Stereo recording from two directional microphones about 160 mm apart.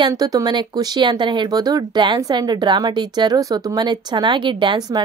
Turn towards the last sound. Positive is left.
turn(degrees=-25)  # may be behind; listen again after turning